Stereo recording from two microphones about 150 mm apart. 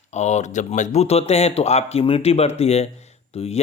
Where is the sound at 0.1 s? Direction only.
50° left (ahead or behind).